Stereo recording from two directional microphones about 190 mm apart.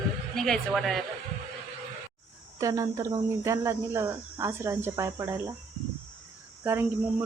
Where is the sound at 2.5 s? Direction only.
15° right (ahead or behind).